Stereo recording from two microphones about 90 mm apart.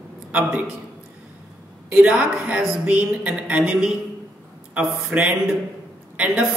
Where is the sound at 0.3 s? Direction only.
20° right (ahead or behind).